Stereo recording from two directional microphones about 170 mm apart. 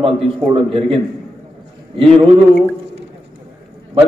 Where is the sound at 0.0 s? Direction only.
35° right (ahead or behind).